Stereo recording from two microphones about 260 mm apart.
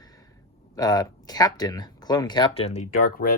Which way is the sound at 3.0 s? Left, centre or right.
Left.